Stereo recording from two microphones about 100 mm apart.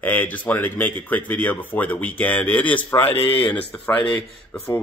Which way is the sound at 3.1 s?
75° left (ahead or behind).